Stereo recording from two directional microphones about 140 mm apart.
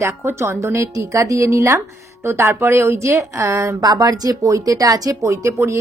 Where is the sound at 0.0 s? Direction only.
15° right (ahead or behind).